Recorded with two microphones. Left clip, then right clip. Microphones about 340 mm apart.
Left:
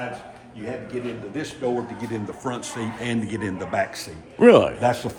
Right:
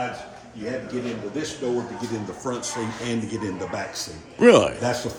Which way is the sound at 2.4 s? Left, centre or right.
Left.